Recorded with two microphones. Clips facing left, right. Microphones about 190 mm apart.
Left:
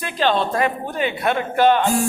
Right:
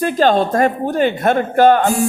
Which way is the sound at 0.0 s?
45° right (ahead or behind).